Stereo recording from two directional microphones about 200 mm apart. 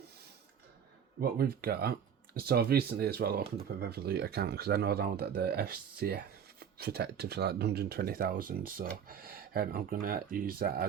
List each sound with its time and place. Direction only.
1.2 s speech: 50° right (ahead or behind)